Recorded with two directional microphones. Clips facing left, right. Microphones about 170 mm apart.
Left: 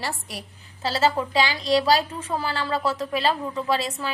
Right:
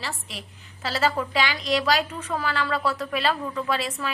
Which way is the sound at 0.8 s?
25° left (ahead or behind).